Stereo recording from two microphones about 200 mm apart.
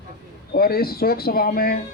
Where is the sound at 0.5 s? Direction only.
50° left (ahead or behind).